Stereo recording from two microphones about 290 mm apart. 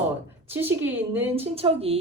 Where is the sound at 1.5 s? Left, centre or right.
Centre.